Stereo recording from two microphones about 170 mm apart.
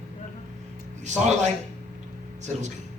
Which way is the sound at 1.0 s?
45° right (ahead or behind).